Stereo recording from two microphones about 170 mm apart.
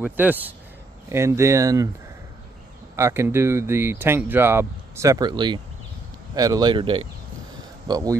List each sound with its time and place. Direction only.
0.0 s speech: 10° right (ahead or behind)
3.0 s speech: 15° right (ahead or behind)